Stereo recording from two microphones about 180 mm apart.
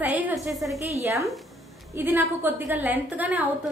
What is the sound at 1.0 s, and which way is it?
A woman's voice, 15° right (ahead or behind).